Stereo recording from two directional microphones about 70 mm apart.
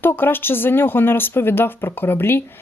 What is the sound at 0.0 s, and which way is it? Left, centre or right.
A woman's voice, left.